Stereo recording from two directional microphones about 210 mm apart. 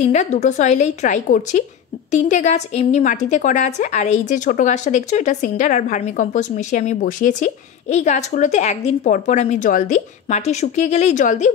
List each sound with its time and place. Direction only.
0.0 s a woman's voice: 35° left (ahead or behind)